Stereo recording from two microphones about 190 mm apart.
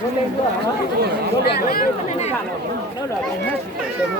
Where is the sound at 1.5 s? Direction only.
50° left (ahead or behind).